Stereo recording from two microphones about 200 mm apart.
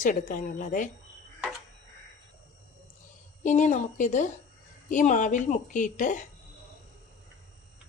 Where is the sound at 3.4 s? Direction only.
40° left (ahead or behind).